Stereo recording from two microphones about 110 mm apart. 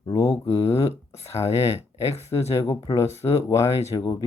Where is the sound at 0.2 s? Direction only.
25° left (ahead or behind).